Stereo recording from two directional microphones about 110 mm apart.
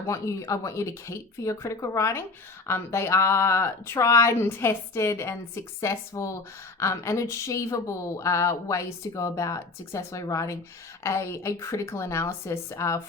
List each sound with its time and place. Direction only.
0.1 s speech: 30° left (ahead or behind)